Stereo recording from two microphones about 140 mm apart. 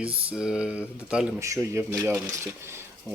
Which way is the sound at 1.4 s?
20° right (ahead or behind).